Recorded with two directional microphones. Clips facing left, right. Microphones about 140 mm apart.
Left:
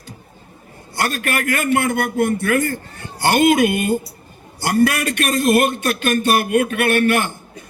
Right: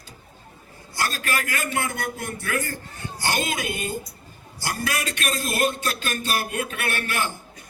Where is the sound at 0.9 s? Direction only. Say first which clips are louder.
Left 5 dB; 60° left (ahead or behind).